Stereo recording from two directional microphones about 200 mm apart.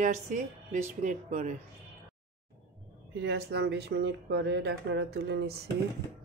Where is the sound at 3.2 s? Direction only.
55° right (ahead or behind).